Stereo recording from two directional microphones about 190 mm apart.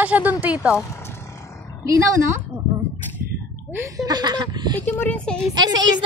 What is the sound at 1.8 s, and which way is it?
Speech, 15° right (ahead or behind).